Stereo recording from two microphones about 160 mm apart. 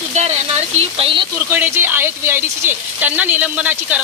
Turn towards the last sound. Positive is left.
turn(degrees=-10)  # may be behind; listen again after turning